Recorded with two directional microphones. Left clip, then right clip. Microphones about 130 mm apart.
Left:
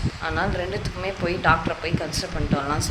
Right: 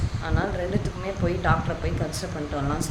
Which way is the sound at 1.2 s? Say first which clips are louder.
Left 4 dB; 5° right (ahead or behind).